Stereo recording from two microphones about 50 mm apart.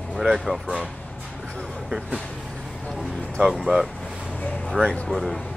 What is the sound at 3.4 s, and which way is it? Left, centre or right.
Speech, centre.